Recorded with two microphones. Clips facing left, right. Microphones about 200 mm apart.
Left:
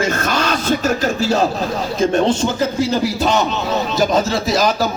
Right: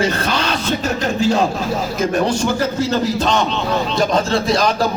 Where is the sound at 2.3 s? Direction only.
20° left (ahead or behind).